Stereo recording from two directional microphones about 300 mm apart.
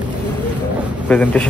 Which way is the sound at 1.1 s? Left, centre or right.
Centre.